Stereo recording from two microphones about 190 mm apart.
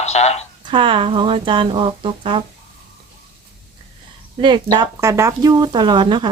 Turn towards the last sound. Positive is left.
turn(degrees=-25)  # may be behind; listen again after turning